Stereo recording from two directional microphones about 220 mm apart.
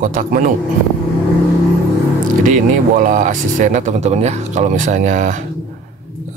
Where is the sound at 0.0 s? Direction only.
40° right (ahead or behind).